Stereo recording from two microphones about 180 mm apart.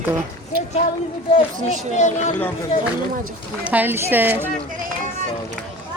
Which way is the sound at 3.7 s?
10° right (ahead or behind).